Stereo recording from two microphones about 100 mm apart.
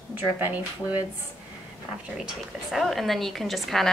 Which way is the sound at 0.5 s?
15° right (ahead or behind).